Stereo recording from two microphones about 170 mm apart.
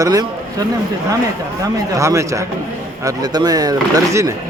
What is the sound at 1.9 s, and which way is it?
Speech, 15° right (ahead or behind).